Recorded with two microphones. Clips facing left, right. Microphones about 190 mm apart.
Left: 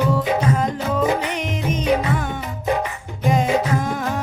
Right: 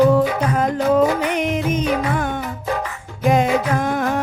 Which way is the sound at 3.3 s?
60° right (ahead or behind).